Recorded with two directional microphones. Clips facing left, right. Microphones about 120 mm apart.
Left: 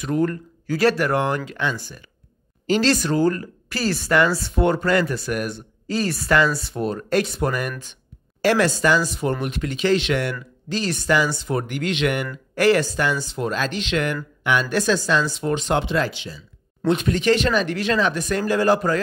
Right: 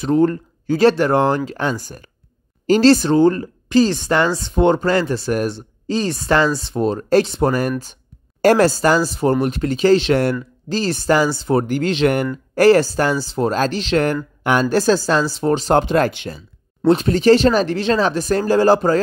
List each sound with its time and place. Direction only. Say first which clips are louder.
0.0 s speech: right 6 dB; 30° right (ahead or behind); by 16.4 s 55° right (ahead or behind)
16.8 s speech: right 6 dB; 35° right (ahead or behind)